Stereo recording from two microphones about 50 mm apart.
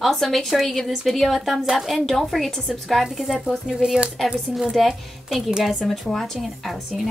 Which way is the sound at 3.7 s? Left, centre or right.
Centre.